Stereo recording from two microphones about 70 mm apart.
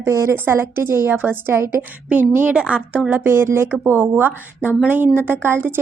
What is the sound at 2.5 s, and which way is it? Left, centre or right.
Speech, centre.